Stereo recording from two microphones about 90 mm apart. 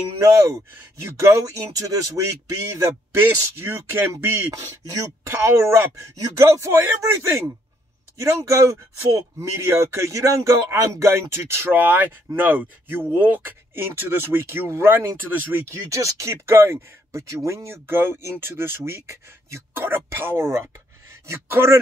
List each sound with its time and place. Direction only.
0.2 s speech: 35° right (ahead or behind)
1.9 s speech: 40° right (ahead or behind)
3.2 s speech: 25° right (ahead or behind)